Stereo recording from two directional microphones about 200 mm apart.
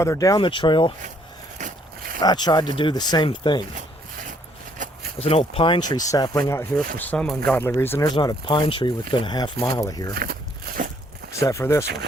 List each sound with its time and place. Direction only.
0.0 s speech: 15° left (ahead or behind)
2.2 s speech: 20° left (ahead or behind)
4.8 s a sound: 40° right (ahead or behind)
5.2 s speech: 30° left (ahead or behind)
7.0 s speech: 5° left (ahead or behind)
10.7 s a sound: 50° right (ahead or behind)
11.3 s speech: 15° left (ahead or behind)